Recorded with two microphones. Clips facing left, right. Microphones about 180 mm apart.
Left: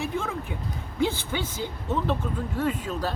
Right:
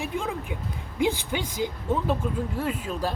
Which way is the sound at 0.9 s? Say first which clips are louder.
Right 1 dB; 15° right (ahead or behind).